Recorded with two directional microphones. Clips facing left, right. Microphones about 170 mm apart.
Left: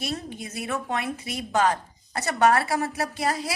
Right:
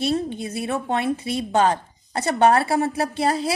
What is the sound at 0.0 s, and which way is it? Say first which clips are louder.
A woman's voice: right 9 dB; 30° right (ahead or behind).